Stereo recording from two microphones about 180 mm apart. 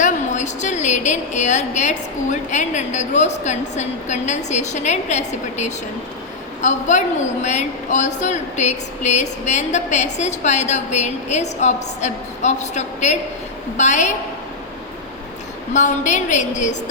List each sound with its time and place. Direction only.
0.0 s speech: 40° left (ahead or behind)
15.7 s speech: 45° left (ahead or behind)